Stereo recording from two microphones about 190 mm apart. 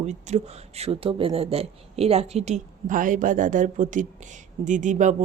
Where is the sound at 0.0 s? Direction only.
35° right (ahead or behind).